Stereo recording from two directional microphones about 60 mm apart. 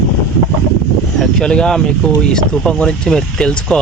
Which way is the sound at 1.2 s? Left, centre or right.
Centre.